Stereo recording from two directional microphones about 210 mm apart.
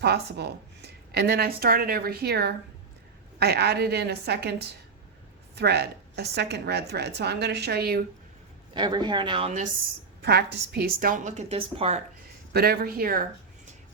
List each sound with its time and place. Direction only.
0.0 s a woman's voice: 50° right (ahead or behind)
8.7 s a woman's voice: 20° right (ahead or behind)
10.2 s a woman's voice: 50° right (ahead or behind); by 11.9 s 30° right (ahead or behind)
12.5 s a woman's voice: 45° right (ahead or behind)